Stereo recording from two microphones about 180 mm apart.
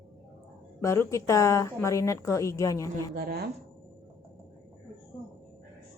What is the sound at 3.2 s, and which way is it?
Speech, 55° right (ahead or behind).